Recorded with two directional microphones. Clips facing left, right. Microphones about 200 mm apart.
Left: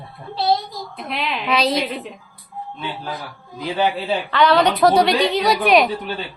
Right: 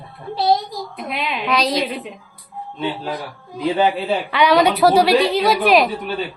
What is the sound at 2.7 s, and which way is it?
Speech, 25° right (ahead or behind).